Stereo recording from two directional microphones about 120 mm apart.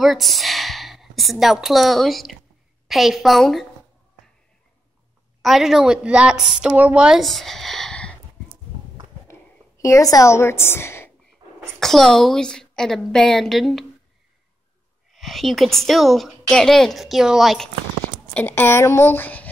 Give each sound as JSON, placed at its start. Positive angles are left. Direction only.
{"t": 0.0, "sound": "a woman's voice", "side_deg": 0}
{"t": 5.4, "sound": "a woman's voice", "side_deg": 0}
{"t": 9.3, "sound": "a woman's voice", "side_deg": 25}
{"t": 11.8, "sound": "a woman's voice", "side_deg": 0}
{"t": 15.0, "sound": "a woman's voice", "side_deg": 0}
{"t": 18.3, "sound": "a woman's voice", "side_deg": 15}